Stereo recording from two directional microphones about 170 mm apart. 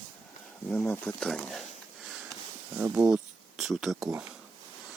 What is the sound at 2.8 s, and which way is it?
Speech, 5° right (ahead or behind).